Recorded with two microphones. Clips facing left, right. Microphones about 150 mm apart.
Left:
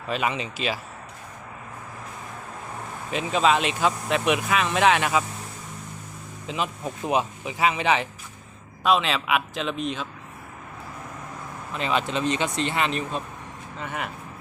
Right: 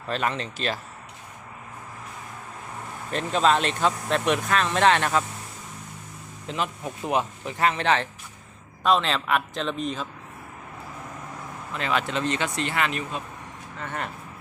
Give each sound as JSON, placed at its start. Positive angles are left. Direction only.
{"t": 0.1, "sound": "speech", "side_deg": 10}
{"t": 3.1, "sound": "speech", "side_deg": 5}
{"t": 6.5, "sound": "speech", "side_deg": 15}
{"t": 11.7, "sound": "speech", "side_deg": 20}
{"t": 13.8, "sound": "speech", "side_deg": 5}